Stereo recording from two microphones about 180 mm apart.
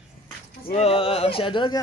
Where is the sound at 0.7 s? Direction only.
35° left (ahead or behind).